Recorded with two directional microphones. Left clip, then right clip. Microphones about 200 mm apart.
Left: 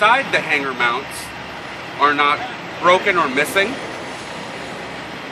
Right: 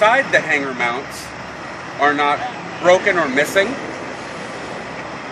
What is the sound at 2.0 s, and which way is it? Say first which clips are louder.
Speech: left 1 dB; 20° right (ahead or behind).